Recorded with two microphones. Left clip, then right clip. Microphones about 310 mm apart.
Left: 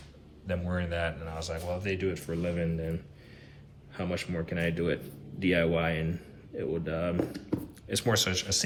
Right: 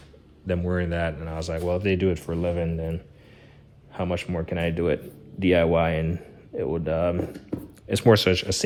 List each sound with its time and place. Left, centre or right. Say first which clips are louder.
0.4 s a man's voice: right 7 dB; right
7.2 s speech: right 1 dB; centre
7.9 s a man's voice: right 9 dB; right